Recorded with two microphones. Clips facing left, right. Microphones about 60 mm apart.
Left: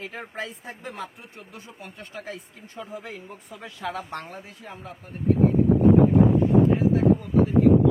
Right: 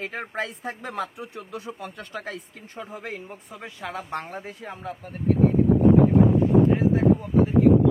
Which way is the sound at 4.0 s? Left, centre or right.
Right.